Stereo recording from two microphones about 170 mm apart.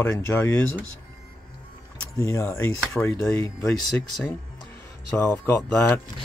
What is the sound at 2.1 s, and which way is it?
Speech, 15° left (ahead or behind).